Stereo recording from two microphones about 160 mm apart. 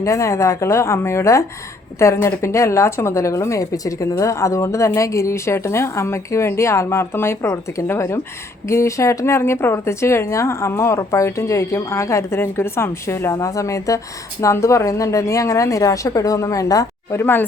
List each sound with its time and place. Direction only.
0.0 s a woman's voice: 20° left (ahead or behind)